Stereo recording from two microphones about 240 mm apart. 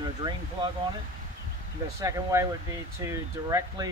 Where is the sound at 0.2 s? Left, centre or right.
Centre.